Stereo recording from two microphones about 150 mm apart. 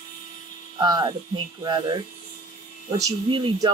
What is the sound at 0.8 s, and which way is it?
Speech, 25° right (ahead or behind).